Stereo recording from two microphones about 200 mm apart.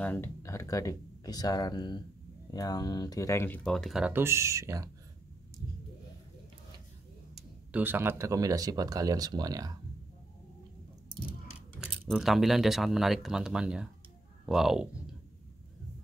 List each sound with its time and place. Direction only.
0.0 s speech: 10° left (ahead or behind); by 4.8 s 15° right (ahead or behind)
7.7 s speech: 10° right (ahead or behind)
11.8 s speech: centre (ahead or behind)